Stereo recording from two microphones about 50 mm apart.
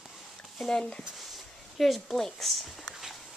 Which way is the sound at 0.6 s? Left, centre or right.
Centre.